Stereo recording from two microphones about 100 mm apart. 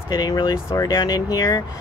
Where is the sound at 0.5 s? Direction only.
35° left (ahead or behind).